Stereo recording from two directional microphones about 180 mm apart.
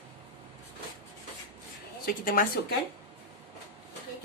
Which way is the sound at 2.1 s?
50° left (ahead or behind).